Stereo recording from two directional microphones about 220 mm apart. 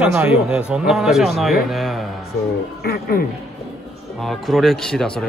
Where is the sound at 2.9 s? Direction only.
45° left (ahead or behind).